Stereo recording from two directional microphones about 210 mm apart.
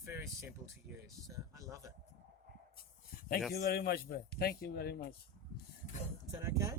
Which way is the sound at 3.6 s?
50° left (ahead or behind).